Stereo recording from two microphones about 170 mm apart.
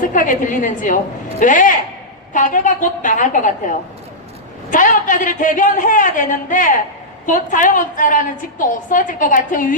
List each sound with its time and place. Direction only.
0.0 s a woman's voice: 50° left (ahead or behind)